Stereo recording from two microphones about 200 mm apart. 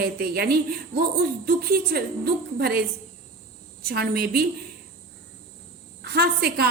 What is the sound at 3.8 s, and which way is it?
Speech, 50° right (ahead or behind).